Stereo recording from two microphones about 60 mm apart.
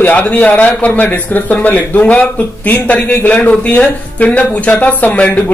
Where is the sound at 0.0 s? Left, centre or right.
Left.